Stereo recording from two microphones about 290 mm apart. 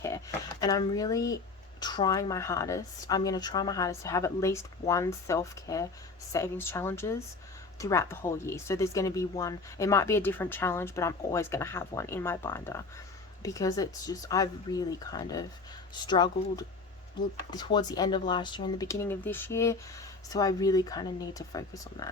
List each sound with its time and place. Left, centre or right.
0.6 s speech: centre